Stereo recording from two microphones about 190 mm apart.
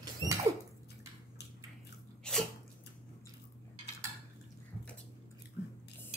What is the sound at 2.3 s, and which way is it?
Sneeze, 5° left (ahead or behind).